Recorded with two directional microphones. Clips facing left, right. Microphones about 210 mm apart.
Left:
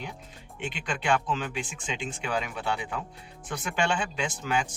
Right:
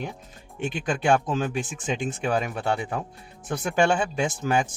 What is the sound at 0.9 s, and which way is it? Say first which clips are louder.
Speech: right 5 dB; 45° right (ahead or behind).